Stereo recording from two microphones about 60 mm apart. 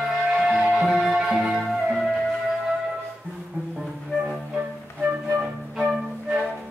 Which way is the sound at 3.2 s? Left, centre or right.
Left.